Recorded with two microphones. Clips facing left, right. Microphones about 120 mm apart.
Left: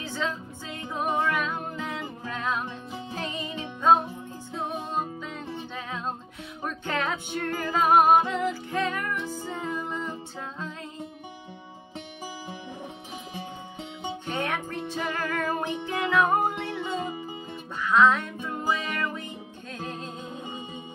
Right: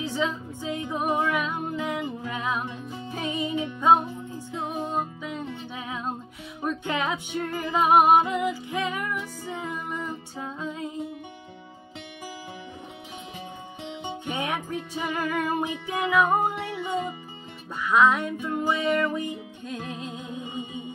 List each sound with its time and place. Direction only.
0.1 s music: 10° right (ahead or behind)
14.2 s music: 10° right (ahead or behind)